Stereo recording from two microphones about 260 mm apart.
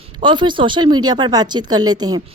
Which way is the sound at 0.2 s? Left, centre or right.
Centre.